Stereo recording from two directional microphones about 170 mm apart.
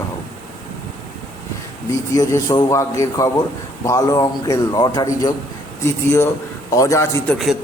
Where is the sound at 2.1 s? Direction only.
20° left (ahead or behind).